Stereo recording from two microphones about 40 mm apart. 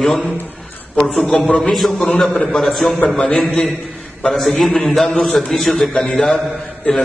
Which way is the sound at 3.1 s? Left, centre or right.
Centre.